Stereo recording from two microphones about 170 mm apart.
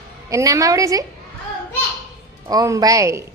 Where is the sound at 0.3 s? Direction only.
20° right (ahead or behind).